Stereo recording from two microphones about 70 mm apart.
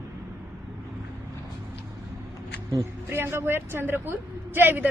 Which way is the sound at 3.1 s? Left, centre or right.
Right.